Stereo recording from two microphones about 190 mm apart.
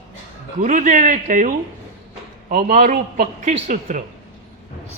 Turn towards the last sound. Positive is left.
turn(degrees=-40)  # may be behind; listen again after turning